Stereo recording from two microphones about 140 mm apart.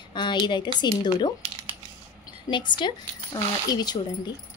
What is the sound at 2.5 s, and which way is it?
A woman's voice, 35° left (ahead or behind).